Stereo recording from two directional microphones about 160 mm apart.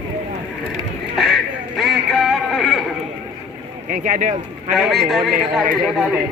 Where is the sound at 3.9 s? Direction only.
50° right (ahead or behind).